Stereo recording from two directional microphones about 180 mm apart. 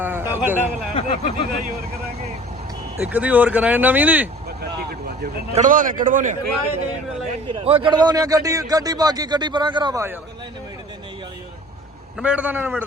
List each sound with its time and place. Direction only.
0.0 s a man's voice: 10° right (ahead or behind)
0.9 s speech: 35° left (ahead or behind)
3.0 s speech: 10° right (ahead or behind)
4.6 s vehicle: 60° right (ahead or behind)
5.5 s a man's voice: 45° right (ahead or behind)
7.4 s speech: 30° right (ahead or behind)
12.2 s speech: 5° right (ahead or behind)